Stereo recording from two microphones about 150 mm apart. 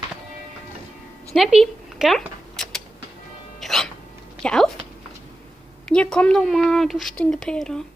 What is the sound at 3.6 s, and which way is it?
Music, 5° left (ahead or behind).